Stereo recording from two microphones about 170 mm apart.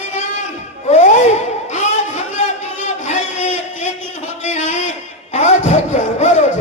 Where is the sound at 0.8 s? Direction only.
45° left (ahead or behind).